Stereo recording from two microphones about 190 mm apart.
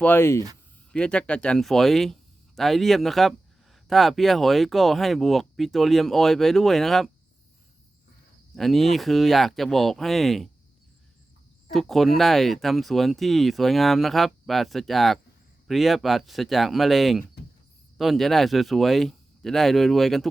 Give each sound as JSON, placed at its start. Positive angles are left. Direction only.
{"t": 0.0, "sound": "speech", "side_deg": 10}
{"t": 8.5, "sound": "speech", "side_deg": 0}
{"t": 11.7, "sound": "speech", "side_deg": 0}